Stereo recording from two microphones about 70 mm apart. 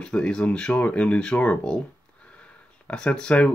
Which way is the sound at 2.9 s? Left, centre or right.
Centre.